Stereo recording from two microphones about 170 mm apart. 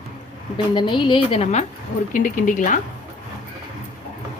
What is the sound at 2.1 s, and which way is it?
Speech, 50° left (ahead or behind).